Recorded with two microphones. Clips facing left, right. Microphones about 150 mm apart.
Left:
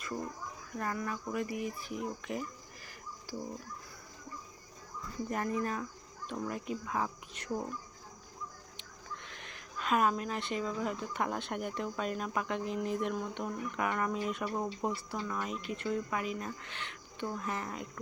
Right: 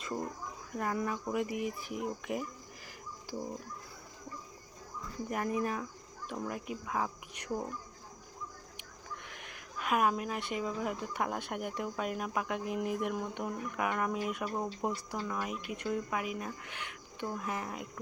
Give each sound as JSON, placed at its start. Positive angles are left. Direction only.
{"t": 0.7, "sound": "speech", "side_deg": -15}
{"t": 5.3, "sound": "speech", "side_deg": -10}
{"t": 8.8, "sound": "speech", "side_deg": -10}